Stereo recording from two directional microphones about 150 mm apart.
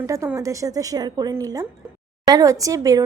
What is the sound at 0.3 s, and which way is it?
A woman's voice, 20° right (ahead or behind).